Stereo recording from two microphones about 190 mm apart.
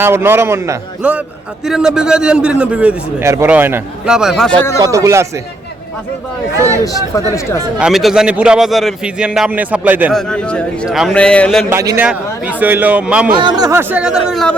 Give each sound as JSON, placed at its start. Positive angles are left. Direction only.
{"t": 0.0, "sound": "a man's voice", "side_deg": -10}
{"t": 4.8, "sound": "a man's voice", "side_deg": -15}
{"t": 7.8, "sound": "a man's voice", "side_deg": 0}
{"t": 10.1, "sound": "a man's voice", "side_deg": 5}
{"t": 11.7, "sound": "a man's voice", "side_deg": -15}
{"t": 13.3, "sound": "a man's voice", "side_deg": -25}